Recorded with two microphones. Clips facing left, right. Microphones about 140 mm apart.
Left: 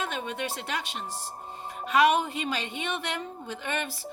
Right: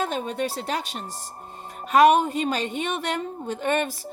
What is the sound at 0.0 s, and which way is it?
A woman's voice, 35° right (ahead or behind).